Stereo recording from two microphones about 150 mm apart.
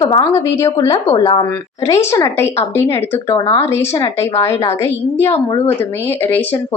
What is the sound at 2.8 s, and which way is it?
Speech, 15° left (ahead or behind).